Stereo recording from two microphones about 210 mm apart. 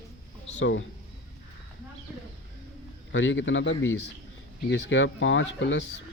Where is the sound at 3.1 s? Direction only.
65° left (ahead or behind).